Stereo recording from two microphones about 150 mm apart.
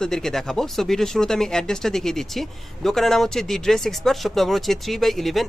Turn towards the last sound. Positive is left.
turn(degrees=0)  # may be behind; listen again after turning